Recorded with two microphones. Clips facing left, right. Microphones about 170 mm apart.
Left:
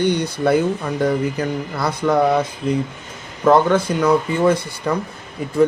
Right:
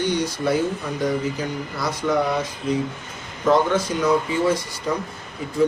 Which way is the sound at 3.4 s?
55° left (ahead or behind).